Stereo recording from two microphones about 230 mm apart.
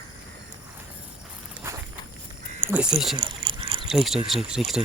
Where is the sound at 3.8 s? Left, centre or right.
Centre.